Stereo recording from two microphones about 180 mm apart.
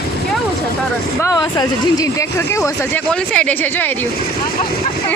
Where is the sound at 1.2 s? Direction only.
20° left (ahead or behind).